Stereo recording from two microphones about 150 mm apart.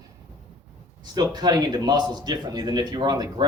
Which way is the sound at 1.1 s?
25° right (ahead or behind).